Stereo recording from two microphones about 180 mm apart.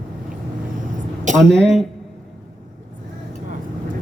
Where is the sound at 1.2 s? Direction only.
45° right (ahead or behind).